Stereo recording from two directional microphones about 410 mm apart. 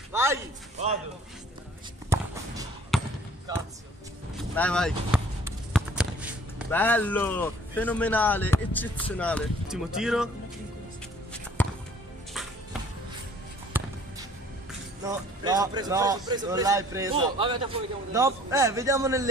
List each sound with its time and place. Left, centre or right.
0.1 s a sound: centre
0.8 s a man's voice: centre
2.0 s basketball bounce: centre
3.5 s a man's voice: centre
4.6 s speech: centre
11.6 s music: centre
13.7 s basketball bounce: centre
15.0 s a man's voice: centre